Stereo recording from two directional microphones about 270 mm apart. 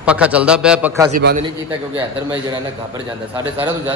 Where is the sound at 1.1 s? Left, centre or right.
Right.